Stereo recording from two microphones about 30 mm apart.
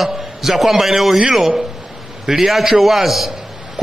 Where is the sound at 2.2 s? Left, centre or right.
Centre.